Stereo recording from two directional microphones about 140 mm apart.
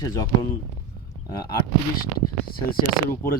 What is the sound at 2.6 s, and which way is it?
Speech, 90° left.